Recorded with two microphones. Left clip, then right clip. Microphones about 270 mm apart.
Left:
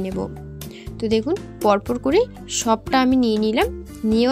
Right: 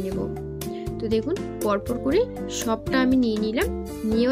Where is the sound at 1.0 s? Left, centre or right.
Left.